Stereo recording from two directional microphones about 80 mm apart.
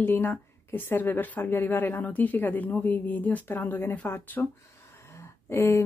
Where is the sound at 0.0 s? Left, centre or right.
Left.